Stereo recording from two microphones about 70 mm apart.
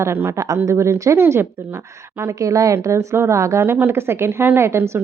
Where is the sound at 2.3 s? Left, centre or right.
Right.